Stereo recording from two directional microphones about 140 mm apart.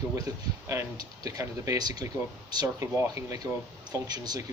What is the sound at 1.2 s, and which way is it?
Speech, 25° right (ahead or behind).